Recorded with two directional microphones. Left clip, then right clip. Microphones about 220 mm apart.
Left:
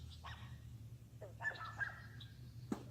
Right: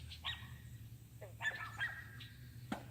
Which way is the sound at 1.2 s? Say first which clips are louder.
Right 3 dB; 15° left (ahead or behind).